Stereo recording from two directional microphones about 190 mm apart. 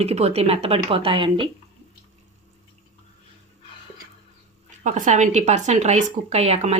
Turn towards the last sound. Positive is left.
turn(degrees=-35)  # may be behind; listen again after turning